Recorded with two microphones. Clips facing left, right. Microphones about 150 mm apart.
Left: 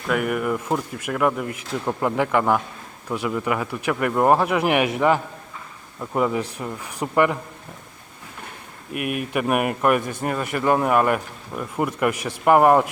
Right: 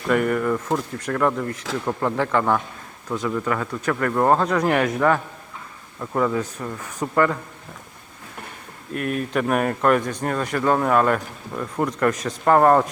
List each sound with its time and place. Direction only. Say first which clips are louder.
0.1 s speech: right 2 dB; 5° left (ahead or behind)
8.9 s speech: right 1 dB; 15° left (ahead or behind)